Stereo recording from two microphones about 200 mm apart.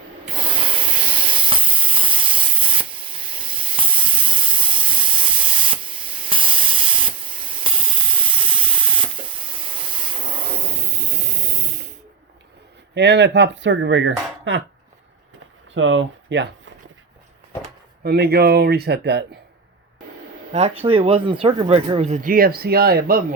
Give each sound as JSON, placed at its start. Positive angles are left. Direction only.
{"t": 0.3, "sound": "steam", "side_deg": -25}
{"t": 12.9, "sound": "speech", "side_deg": -60}
{"t": 15.7, "sound": "speech", "side_deg": -70}
{"t": 18.0, "sound": "speech", "side_deg": -50}
{"t": 20.5, "sound": "speech", "side_deg": -35}